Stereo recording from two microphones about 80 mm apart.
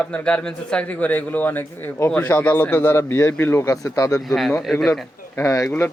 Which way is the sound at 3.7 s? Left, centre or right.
Left.